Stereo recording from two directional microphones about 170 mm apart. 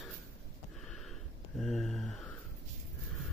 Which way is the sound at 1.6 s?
5° left (ahead or behind).